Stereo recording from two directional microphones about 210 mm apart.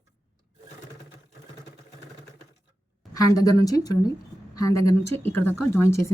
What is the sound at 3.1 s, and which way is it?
A woman's voice, 15° left (ahead or behind).